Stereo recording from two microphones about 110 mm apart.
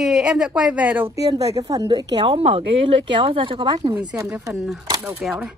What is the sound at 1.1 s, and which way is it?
Speech, 35° right (ahead or behind).